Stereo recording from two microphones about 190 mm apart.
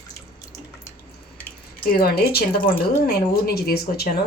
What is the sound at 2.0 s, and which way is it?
Speech, 55° left (ahead or behind).